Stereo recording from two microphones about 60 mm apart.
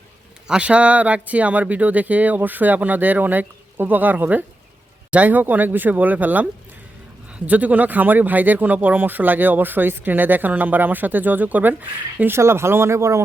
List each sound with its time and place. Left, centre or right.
0.4 s speech: centre
12.4 s speech: right